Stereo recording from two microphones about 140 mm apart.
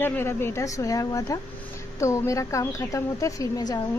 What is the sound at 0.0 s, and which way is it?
A woman's voice, 15° left (ahead or behind).